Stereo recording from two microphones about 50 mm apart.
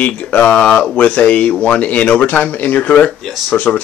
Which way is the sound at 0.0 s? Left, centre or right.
Left.